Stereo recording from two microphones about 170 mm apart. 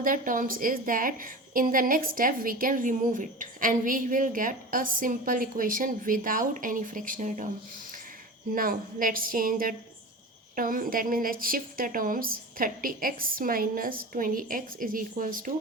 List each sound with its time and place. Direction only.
0.0 s a woman's voice: 55° right (ahead or behind)
8.5 s a woman's voice: 55° right (ahead or behind)